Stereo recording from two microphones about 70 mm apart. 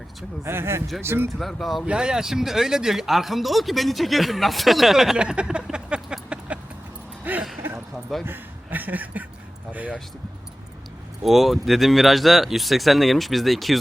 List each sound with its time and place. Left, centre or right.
0.4 s speech: right
1.4 s speech: centre
1.9 s speech: centre
5.2 s a sound: centre
7.3 s a sound: right
8.2 s speech: right
11.2 s speech: centre